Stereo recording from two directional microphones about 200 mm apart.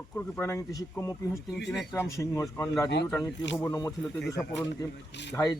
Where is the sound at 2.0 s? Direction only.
15° left (ahead or behind).